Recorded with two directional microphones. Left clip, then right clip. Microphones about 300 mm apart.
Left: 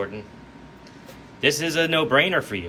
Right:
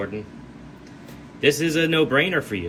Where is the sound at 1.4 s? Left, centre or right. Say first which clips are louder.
Right 1 dB; centre.